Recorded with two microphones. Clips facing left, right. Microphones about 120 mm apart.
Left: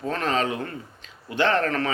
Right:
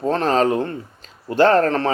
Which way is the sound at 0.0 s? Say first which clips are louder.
Right 7 dB; 35° right (ahead or behind).